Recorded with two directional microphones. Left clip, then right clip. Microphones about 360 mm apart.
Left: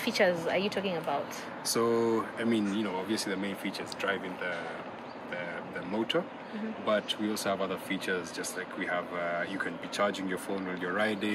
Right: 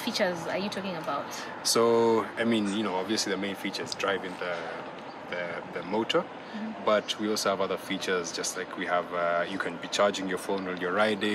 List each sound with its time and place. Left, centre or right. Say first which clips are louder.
0.0 s a woman's voice: left 2 dB; centre
1.6 s speech: right 5 dB; centre
6.9 s speech: right 4 dB; centre